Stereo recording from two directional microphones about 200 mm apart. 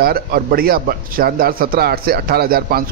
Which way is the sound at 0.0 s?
50° right (ahead or behind).